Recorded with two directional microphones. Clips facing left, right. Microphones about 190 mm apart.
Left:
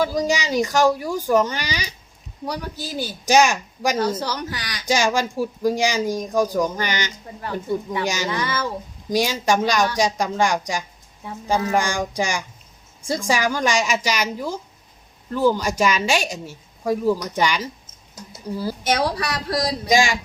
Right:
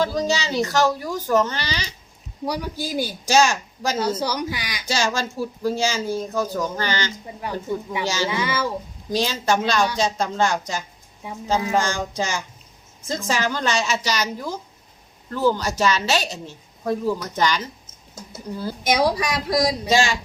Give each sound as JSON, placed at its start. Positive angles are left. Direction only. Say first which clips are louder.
{"t": 0.0, "sound": "a woman's voice", "louder": "left 1 dB", "side_deg": 10}
{"t": 2.4, "sound": "speech", "louder": "right 2 dB", "side_deg": -10}
{"t": 3.2, "sound": "a woman's voice", "louder": "left 2 dB", "side_deg": 15}
{"t": 4.2, "sound": "speech", "louder": "right 2 dB", "side_deg": -10}
{"t": 4.9, "sound": "a woman's voice", "louder": "left 4 dB", "side_deg": 15}
{"t": 8.3, "sound": "speech", "louder": "right 1 dB", "side_deg": -10}
{"t": 9.0, "sound": "a woman's voice", "louder": "left 2 dB", "side_deg": 15}
{"t": 11.2, "sound": "speech", "louder": "even", "side_deg": -15}
{"t": 11.7, "sound": "a woman's voice", "louder": "left 1 dB", "side_deg": 15}
{"t": 18.8, "sound": "speech", "louder": "right 3 dB", "side_deg": -10}
{"t": 19.9, "sound": "a woman's voice", "louder": "left 3 dB", "side_deg": 15}